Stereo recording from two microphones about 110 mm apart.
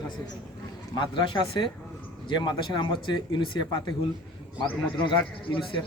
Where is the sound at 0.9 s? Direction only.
45° left (ahead or behind).